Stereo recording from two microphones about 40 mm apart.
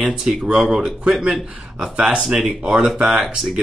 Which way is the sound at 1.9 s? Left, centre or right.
Right.